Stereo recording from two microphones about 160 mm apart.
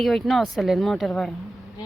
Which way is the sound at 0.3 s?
Centre (ahead or behind).